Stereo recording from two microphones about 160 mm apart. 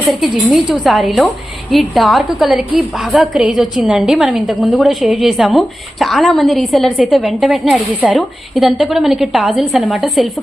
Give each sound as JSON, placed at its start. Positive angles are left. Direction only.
{"t": 0.1, "sound": "a woman's voice", "side_deg": 0}